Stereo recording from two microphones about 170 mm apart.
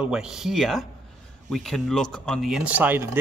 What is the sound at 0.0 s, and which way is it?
Speech, 5° right (ahead or behind).